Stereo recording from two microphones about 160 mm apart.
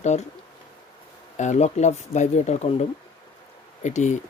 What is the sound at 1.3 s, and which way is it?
Speech, 45° left (ahead or behind).